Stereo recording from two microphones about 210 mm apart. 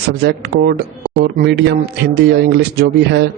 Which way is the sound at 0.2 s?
50° right (ahead or behind).